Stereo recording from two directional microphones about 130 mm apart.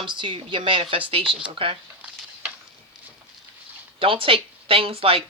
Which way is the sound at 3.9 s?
45° right (ahead or behind).